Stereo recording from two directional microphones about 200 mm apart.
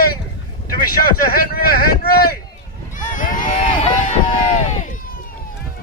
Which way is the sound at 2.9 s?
40° left (ahead or behind).